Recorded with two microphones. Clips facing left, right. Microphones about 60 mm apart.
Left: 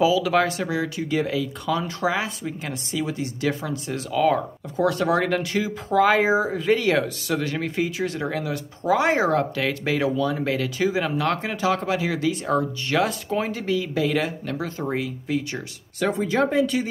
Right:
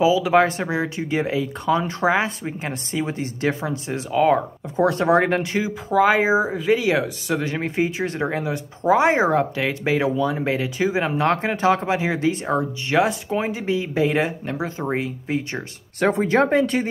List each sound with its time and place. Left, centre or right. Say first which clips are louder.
0.0 s speech: right 3 dB; right
5.9 s speech: right 1 dB; centre; by 15.6 s right
16.0 s speech: right 4 dB; right